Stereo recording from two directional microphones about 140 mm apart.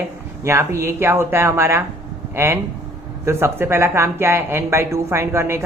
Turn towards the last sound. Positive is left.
turn(degrees=-15)  # may be behind; listen again after turning